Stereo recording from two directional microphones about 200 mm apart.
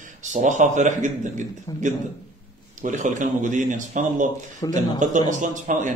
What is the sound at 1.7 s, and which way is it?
Speech, 20° left (ahead or behind).